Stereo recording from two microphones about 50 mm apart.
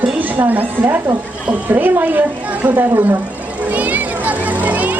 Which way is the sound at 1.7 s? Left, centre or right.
Right.